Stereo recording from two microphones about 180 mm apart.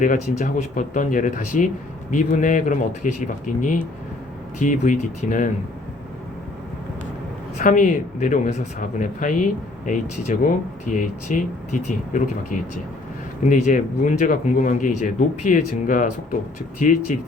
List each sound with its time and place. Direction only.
0.0 s speech: 45° left (ahead or behind)
7.6 s speech: 45° left (ahead or behind)